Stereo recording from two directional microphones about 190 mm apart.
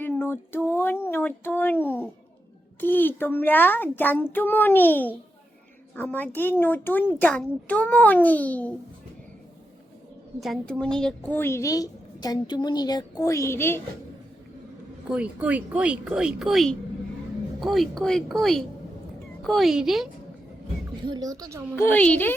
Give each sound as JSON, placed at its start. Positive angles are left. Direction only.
{"t": 0.0, "sound": "a sound", "side_deg": 10}
{"t": 2.8, "sound": "a woman's voice", "side_deg": 10}
{"t": 10.4, "sound": "a woman's voice", "side_deg": 0}
{"t": 15.1, "sound": "speech", "side_deg": -5}
{"t": 21.1, "sound": "speech", "side_deg": -20}
{"t": 21.8, "sound": "a woman's voice", "side_deg": 10}